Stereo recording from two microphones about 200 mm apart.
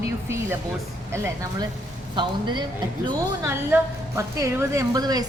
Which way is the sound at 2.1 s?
25° right (ahead or behind).